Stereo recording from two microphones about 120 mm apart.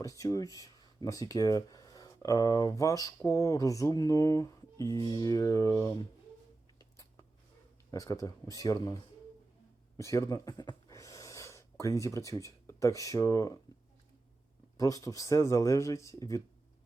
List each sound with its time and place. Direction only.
0.0 s speech: 30° left (ahead or behind)
6.7 s a sound: 30° left (ahead or behind)
7.9 s speech: 30° left (ahead or behind)
10.0 s speech: 25° left (ahead or behind)
14.8 s speech: 30° left (ahead or behind)